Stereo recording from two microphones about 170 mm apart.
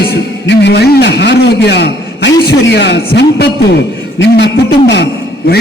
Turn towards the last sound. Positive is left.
turn(degrees=85)